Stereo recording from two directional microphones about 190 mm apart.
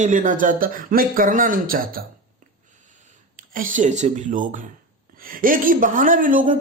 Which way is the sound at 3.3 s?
45° right (ahead or behind).